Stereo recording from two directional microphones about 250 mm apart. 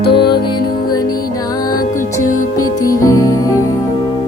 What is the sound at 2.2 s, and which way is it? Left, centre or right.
Music, left.